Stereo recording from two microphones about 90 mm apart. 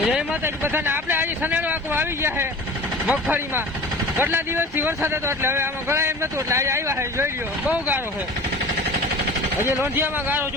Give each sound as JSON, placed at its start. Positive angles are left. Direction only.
{"t": 0.4, "sound": "speech", "side_deg": -25}
{"t": 9.6, "sound": "speech", "side_deg": -25}